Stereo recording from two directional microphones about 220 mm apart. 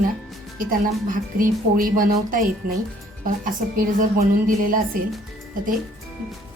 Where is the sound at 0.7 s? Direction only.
40° right (ahead or behind).